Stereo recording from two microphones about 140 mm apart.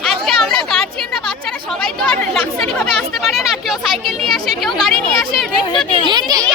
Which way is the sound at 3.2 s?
Centre (ahead or behind).